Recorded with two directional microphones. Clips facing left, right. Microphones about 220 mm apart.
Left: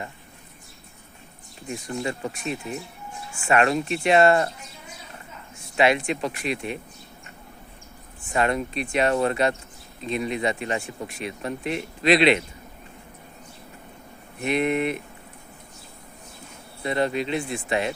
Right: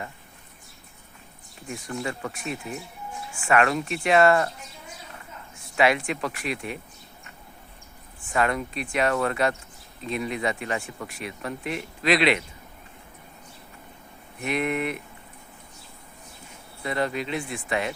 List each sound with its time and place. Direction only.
1.7 s speech: 20° left (ahead or behind)
5.7 s speech: 25° left (ahead or behind)
8.3 s speech: 25° left (ahead or behind)
14.4 s speech: 25° left (ahead or behind)
16.8 s speech: 25° left (ahead or behind)